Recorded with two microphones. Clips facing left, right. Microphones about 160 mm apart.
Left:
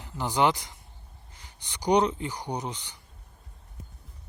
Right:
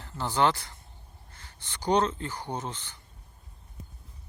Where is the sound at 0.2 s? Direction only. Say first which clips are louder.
Left 1 dB; 15° left (ahead or behind).